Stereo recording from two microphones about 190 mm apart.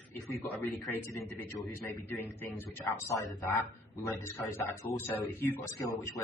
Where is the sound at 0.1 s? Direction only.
10° left (ahead or behind).